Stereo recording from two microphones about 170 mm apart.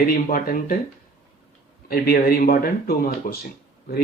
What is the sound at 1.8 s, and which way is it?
Speech, 60° left (ahead or behind).